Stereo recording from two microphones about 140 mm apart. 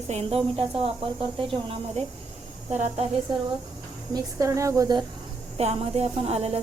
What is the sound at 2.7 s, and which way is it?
Speech, 55° right (ahead or behind).